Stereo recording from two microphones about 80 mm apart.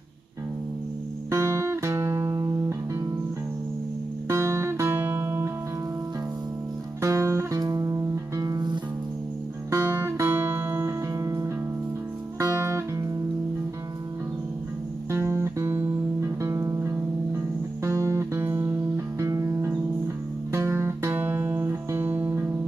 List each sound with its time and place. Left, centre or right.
1.3 s music: right
4.3 s music: right
7.0 s music: right
9.7 s music: right
11.1 s music: right
15.0 s music: right
21.1 s music: right